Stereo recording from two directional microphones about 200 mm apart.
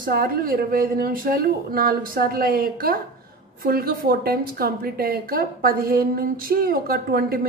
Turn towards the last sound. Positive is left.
turn(degrees=-50)  # may be behind; listen again after turning